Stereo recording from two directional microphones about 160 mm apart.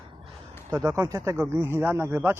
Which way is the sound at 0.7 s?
15° right (ahead or behind).